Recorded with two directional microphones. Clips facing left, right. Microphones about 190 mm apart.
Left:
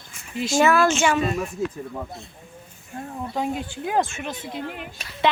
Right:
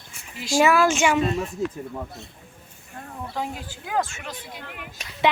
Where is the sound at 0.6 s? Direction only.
10° right (ahead or behind).